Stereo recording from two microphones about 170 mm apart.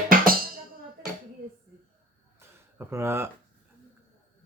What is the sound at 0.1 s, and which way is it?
Music, 55° right (ahead or behind).